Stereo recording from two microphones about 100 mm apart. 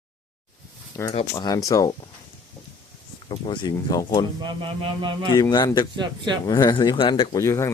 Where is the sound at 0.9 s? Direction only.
30° left (ahead or behind).